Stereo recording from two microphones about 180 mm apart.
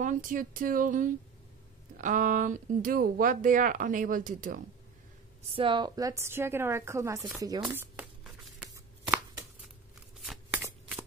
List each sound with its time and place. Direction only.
0.0 s speech: 45° right (ahead or behind)
5.5 s a woman's voice: 30° right (ahead or behind)
7.6 s a sound: 10° right (ahead or behind)
10.6 s shuffling cards: 15° right (ahead or behind)